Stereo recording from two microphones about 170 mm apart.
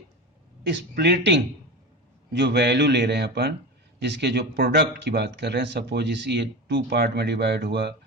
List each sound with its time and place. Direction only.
0.6 s speech: 90° right